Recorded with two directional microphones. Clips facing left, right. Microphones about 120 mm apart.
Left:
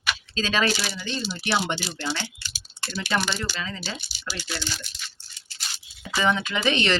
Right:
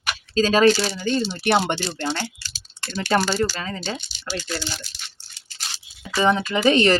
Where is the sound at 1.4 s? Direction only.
55° right (ahead or behind).